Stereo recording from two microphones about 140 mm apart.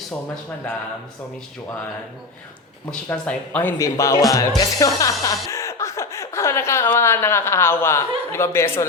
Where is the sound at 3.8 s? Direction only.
25° left (ahead or behind).